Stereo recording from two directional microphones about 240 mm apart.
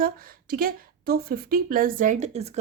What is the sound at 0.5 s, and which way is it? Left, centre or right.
A woman's voice, right.